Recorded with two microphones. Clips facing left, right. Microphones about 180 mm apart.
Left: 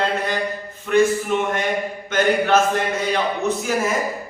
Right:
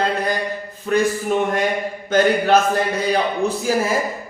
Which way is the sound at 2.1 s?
35° right (ahead or behind).